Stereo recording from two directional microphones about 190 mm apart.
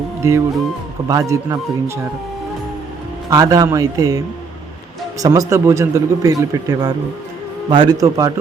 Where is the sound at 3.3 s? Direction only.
20° right (ahead or behind).